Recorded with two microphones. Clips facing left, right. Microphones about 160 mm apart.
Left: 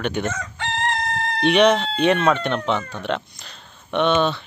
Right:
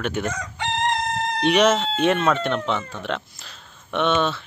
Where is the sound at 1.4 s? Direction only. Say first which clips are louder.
Left 2 dB; centre (ahead or behind).